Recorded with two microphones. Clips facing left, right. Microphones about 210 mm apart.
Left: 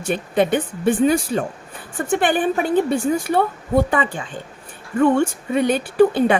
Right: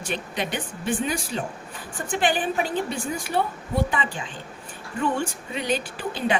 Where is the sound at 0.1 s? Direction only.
50° left (ahead or behind).